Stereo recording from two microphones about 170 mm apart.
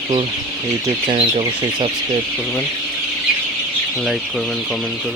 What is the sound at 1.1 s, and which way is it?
Speech, 35° right (ahead or behind).